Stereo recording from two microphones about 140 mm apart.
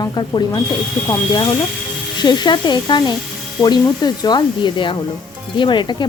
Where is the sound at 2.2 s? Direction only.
30° left (ahead or behind).